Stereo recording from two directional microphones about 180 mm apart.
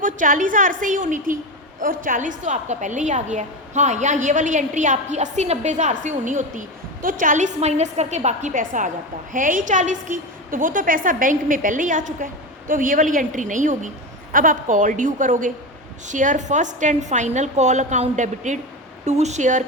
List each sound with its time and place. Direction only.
0.0 s a woman's voice: 45° right (ahead or behind)